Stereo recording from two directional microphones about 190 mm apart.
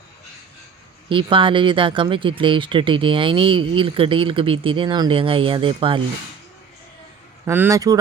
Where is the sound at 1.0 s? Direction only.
25° right (ahead or behind).